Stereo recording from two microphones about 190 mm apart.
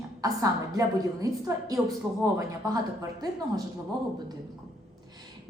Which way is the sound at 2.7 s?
20° right (ahead or behind).